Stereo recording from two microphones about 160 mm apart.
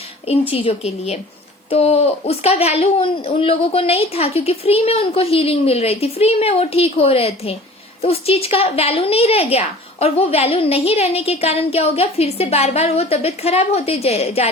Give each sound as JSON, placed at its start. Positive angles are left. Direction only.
{"t": 0.5, "sound": "a woman's voice", "side_deg": 35}